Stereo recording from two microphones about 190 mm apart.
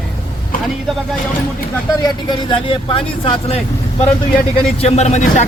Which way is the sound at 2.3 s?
30° left (ahead or behind).